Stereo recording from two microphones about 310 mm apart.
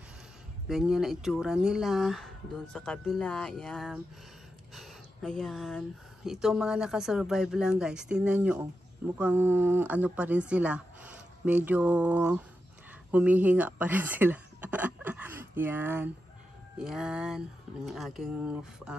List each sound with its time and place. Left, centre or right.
0.7 s speech: centre